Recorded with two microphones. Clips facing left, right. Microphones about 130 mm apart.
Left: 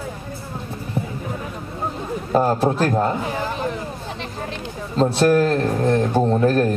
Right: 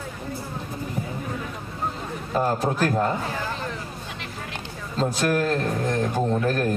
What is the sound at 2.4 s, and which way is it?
Speech, 30° left (ahead or behind).